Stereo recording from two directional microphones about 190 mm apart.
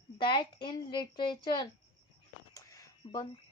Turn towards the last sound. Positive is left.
turn(degrees=20)  # may be behind; listen again after turning